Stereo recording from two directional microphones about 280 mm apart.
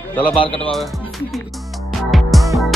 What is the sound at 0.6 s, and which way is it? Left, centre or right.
Music, centre.